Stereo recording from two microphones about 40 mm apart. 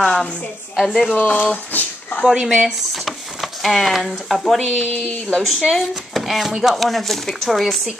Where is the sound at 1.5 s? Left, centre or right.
Left.